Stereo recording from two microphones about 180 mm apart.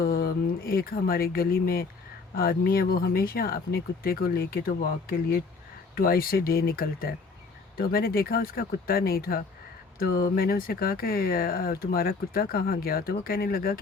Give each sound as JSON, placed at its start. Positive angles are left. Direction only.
{"t": 0.0, "sound": "speech", "side_deg": 60}